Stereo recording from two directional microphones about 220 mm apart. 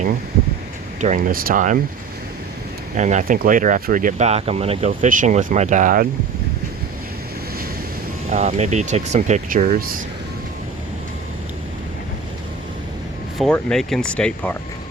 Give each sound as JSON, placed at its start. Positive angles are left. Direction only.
{"t": 1.0, "sound": "speech", "side_deg": -40}
{"t": 2.9, "sound": "speech", "side_deg": -35}
{"t": 8.3, "sound": "speech", "side_deg": -30}
{"t": 13.4, "sound": "speech", "side_deg": 0}